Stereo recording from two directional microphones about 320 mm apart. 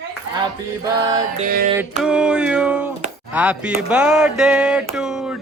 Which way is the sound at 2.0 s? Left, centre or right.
Centre.